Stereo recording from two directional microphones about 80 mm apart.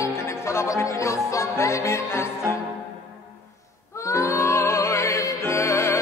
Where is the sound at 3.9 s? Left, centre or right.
Left.